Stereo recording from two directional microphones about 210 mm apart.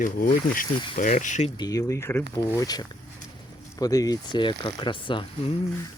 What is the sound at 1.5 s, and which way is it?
Speech, 15° left (ahead or behind).